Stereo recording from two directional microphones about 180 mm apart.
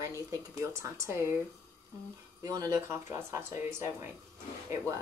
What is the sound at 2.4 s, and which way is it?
Speech, 20° right (ahead or behind).